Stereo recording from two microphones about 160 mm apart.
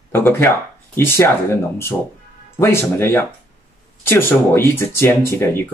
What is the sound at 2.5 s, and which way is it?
Speech, 15° left (ahead or behind).